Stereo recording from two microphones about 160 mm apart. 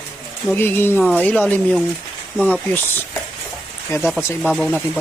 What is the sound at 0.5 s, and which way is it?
Speech, 15° left (ahead or behind).